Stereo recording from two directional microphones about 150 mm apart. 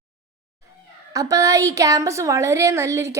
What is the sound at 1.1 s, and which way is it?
A woman's voice, 20° right (ahead or behind).